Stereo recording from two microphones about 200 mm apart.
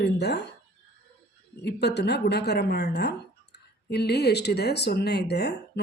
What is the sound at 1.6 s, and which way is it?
A woman's voice, 55° left (ahead or behind).